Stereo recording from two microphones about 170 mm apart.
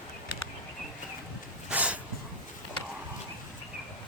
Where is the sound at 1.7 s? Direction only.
10° right (ahead or behind).